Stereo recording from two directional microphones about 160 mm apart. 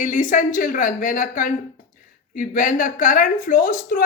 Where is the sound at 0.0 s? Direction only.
55° left (ahead or behind).